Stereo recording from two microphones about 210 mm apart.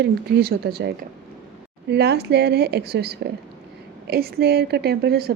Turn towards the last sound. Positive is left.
turn(degrees=-50)  # may be behind; listen again after turning